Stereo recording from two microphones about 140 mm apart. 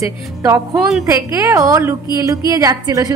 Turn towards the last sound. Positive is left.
turn(degrees=-25)  # may be behind; listen again after turning